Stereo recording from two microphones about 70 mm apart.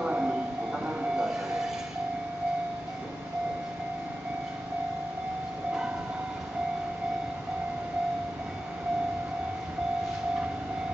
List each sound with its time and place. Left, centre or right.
0.0 s music: centre
0.8 s train: centre